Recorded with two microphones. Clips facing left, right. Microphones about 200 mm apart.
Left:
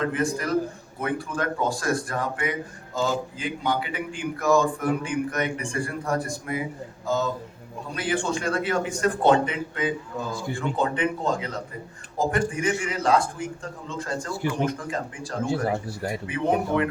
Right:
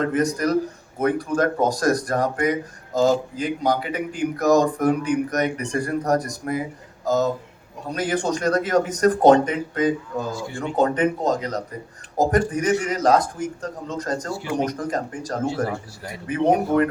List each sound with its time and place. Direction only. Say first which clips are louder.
0.0 s a man's voice: right 5 dB; 40° right (ahead or behind)